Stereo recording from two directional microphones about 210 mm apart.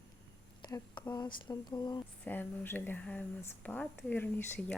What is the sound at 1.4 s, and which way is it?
Speech, 20° left (ahead or behind).